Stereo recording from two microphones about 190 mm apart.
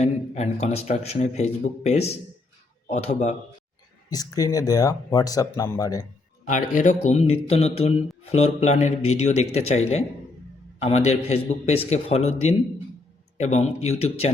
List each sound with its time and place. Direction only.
0.0 s a man's voice: 40° left (ahead or behind)
4.1 s speech: 20° left (ahead or behind)
6.4 s a man's voice: 45° left (ahead or behind)